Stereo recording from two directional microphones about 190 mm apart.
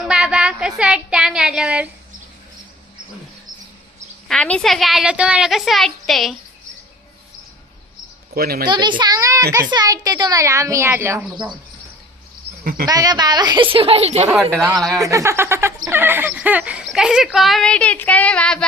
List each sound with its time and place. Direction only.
0.0 s speech: 5° right (ahead or behind)
4.3 s a woman's voice: 5° left (ahead or behind)
8.4 s a woman's voice: 50° right (ahead or behind)
8.6 s a child's voice: 25° right (ahead or behind)
12.8 s a child's voice: 20° right (ahead or behind)
14.5 s a woman's voice: 10° right (ahead or behind); by 18.6 s 5° left (ahead or behind)